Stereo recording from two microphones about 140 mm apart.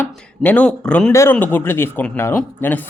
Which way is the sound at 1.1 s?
20° left (ahead or behind).